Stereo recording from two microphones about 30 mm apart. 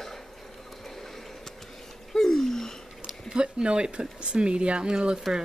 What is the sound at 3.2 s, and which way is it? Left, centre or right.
Speech, right.